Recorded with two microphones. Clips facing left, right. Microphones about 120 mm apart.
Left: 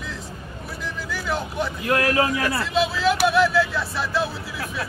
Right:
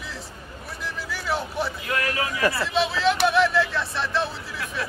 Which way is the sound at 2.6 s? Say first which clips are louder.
Left 2 dB; centre (ahead or behind).